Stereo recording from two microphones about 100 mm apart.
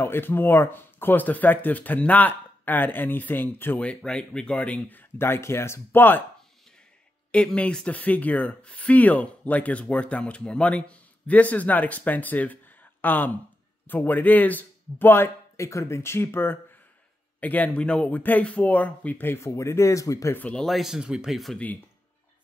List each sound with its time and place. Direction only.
0.0 s speech: 20° left (ahead or behind)
7.2 s speech: 10° left (ahead or behind); by 20.3 s 35° left (ahead or behind)
20.3 s speech: 15° left (ahead or behind)
20.6 s speech: centre (ahead or behind)